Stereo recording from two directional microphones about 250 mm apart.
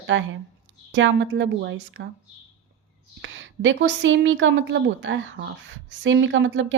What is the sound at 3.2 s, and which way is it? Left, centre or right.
Speech, right.